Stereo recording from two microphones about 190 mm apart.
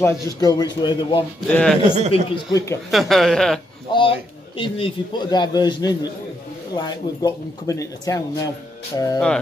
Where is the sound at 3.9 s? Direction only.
25° left (ahead or behind).